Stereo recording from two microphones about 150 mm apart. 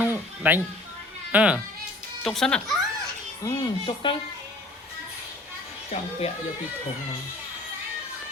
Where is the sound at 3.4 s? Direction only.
30° left (ahead or behind).